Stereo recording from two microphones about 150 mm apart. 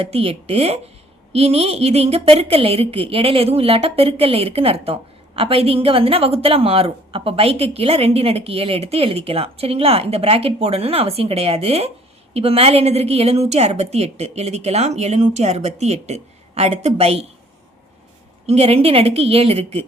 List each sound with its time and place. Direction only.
0.0 s a woman's voice: 40° right (ahead or behind)
18.4 s a woman's voice: 45° right (ahead or behind)